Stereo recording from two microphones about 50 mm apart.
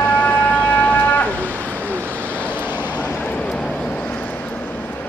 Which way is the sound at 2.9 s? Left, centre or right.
Left.